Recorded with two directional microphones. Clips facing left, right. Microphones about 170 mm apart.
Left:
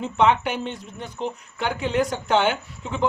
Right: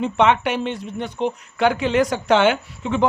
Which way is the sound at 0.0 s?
75° right (ahead or behind).